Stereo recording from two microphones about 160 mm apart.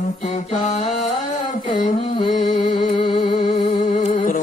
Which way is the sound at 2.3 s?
45° left (ahead or behind).